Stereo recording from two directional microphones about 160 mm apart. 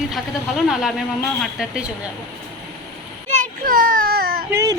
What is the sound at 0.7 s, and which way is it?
A woman's voice, centre (ahead or behind).